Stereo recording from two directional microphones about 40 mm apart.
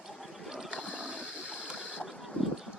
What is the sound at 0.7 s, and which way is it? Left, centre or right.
Boat, right.